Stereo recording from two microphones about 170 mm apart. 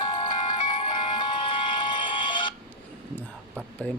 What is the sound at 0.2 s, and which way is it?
Music, 25° left (ahead or behind).